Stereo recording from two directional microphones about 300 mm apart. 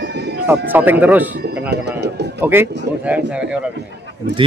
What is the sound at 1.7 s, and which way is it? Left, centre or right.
Bird, right.